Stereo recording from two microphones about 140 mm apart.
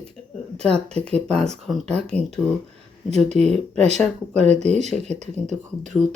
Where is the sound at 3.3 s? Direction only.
50° right (ahead or behind).